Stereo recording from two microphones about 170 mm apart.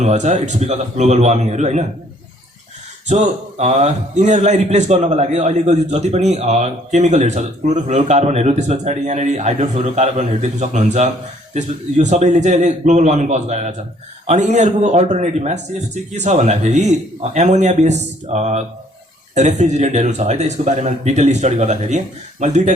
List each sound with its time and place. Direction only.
0.0 s a man's voice: 45° right (ahead or behind)
3.1 s a man's voice: 40° right (ahead or behind)